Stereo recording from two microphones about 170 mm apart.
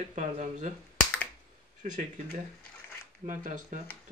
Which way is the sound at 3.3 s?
50° right (ahead or behind).